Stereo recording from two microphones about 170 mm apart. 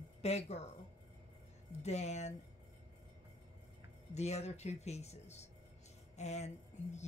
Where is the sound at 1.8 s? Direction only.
40° left (ahead or behind).